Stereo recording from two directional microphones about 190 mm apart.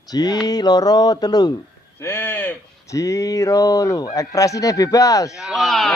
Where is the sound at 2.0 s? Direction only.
15° left (ahead or behind).